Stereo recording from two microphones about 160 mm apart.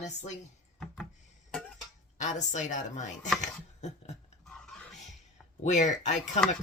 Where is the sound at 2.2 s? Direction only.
50° left (ahead or behind).